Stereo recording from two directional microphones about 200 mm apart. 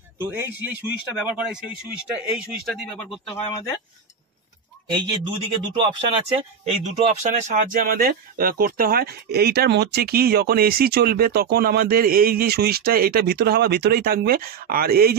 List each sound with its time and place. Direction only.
0.2 s a man's voice: 10° right (ahead or behind)
5.6 s speech: 25° right (ahead or behind); by 15.1 s 50° right (ahead or behind)